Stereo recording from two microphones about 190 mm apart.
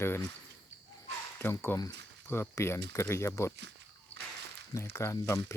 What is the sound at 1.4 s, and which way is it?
Speech, 10° left (ahead or behind).